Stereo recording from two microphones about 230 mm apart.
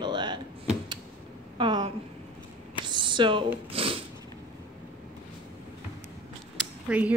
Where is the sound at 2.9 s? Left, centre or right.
Right.